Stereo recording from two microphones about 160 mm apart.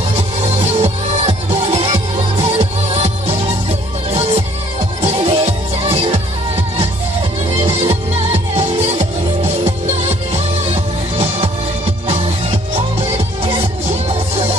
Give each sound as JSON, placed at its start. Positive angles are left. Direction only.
{"t": 0.1, "sound": "music", "side_deg": -40}